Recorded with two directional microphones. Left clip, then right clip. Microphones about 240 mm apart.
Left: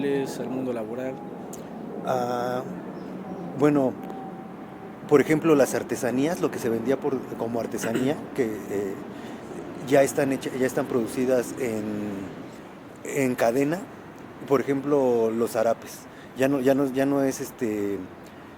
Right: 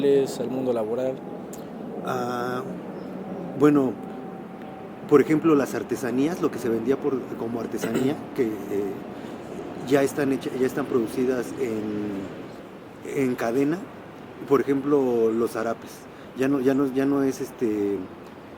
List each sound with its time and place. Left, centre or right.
0.0 s speech: centre
2.0 s speech: left
5.0 s speech: left
9.8 s speech: left
13.1 s a man's voice: left